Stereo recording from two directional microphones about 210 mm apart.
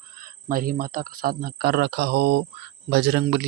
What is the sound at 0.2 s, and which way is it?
Speech, 40° right (ahead or behind).